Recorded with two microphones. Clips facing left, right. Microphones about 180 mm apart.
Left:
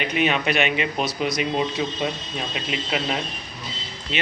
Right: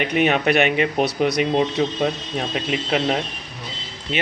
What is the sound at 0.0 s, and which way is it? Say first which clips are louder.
A man's voice: right 4 dB; 50° right (ahead or behind).